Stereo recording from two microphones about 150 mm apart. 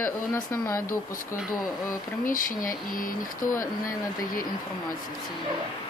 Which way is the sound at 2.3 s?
65° left (ahead or behind).